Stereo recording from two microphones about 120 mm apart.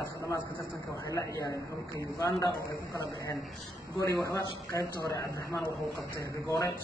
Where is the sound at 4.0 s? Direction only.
25° left (ahead or behind).